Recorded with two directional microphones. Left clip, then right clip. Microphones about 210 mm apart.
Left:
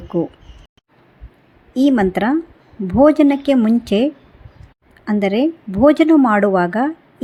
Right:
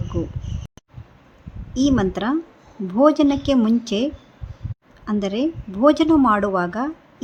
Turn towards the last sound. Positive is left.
turn(degrees=15)  # may be behind; listen again after turning